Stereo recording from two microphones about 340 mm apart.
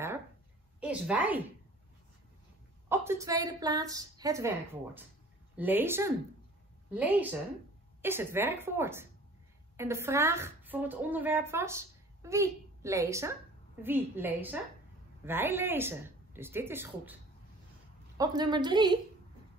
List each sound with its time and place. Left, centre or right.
0.7 s a woman's voice: centre
2.9 s speech: centre
5.6 s a woman's voice: centre